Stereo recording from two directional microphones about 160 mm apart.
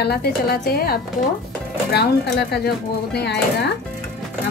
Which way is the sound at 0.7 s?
70° left (ahead or behind).